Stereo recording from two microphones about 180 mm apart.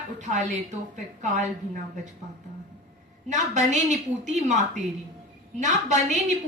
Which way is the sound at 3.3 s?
40° right (ahead or behind).